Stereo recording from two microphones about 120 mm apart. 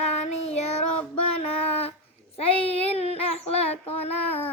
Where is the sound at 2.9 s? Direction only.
60° left (ahead or behind).